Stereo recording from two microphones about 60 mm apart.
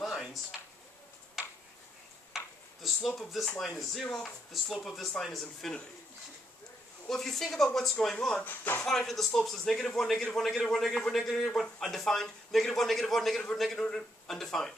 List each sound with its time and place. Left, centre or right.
0.0 s a sound: centre
2.3 s a sound: centre
3.1 s a man's voice: centre
4.0 s speech: centre
4.5 s a man's voice: centre
7.1 s speech: centre
8.5 s speech: left
8.8 s a man's voice: centre